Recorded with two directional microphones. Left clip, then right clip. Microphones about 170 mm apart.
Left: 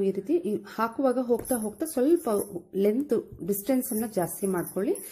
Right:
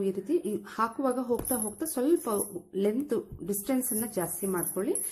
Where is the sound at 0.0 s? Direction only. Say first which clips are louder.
Left 3 dB; 15° left (ahead or behind).